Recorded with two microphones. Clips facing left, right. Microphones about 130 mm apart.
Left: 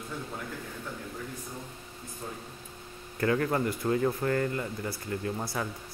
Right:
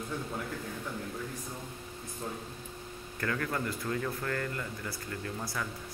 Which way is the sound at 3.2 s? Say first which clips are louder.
Left 7 dB; 30° left (ahead or behind).